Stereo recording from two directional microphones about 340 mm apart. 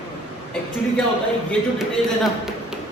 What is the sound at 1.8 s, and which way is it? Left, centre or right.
A man's voice, centre.